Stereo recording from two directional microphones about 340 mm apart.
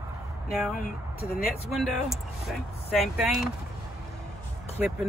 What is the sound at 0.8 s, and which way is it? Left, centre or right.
Speech, left.